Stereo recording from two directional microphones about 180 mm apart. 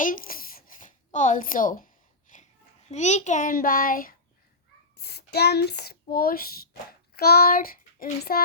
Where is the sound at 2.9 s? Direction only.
40° left (ahead or behind).